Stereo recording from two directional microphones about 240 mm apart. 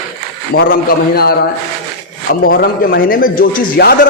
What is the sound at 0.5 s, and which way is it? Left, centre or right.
Speech, left.